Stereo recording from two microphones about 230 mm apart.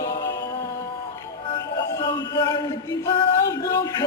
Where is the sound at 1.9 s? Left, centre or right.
Centre.